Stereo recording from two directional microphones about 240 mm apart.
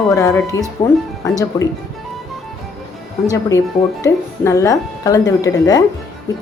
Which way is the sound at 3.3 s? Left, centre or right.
Centre.